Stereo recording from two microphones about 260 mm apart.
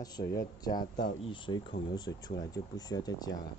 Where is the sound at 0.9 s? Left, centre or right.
Left.